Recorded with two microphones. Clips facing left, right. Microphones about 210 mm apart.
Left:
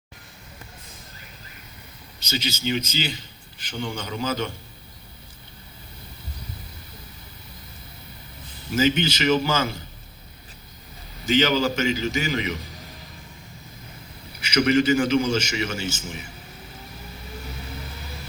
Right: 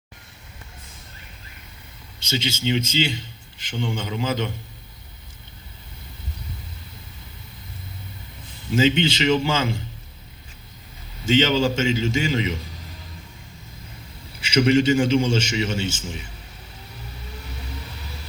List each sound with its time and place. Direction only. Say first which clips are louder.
2.1 s a man's voice: right 2 dB; 25° right (ahead or behind)
8.7 s a man's voice: right 2 dB; 25° right (ahead or behind)
11.3 s a man's voice: right 2 dB; 25° right (ahead or behind)
14.4 s a man's voice: right 2 dB; 30° right (ahead or behind)